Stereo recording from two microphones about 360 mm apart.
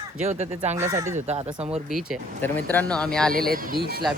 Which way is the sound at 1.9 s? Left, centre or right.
Centre.